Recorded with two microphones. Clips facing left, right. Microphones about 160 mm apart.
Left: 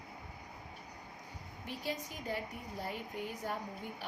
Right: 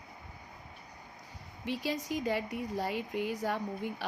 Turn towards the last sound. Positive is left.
turn(degrees=-90)